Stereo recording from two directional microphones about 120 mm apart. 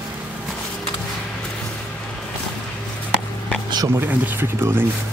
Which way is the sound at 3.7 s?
30° right (ahead or behind).